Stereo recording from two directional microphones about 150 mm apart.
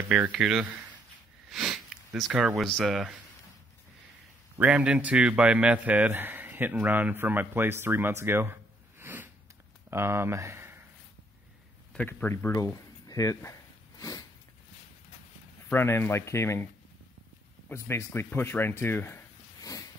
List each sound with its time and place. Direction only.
0.1 s speech: 5° right (ahead or behind)
4.6 s a man's voice: 10° right (ahead or behind)
9.0 s a sound: 15° right (ahead or behind)
9.8 s speech: 15° right (ahead or behind)
11.9 s speech: 10° left (ahead or behind)
15.7 s speech: 15° left (ahead or behind)
17.6 s speech: 15° left (ahead or behind)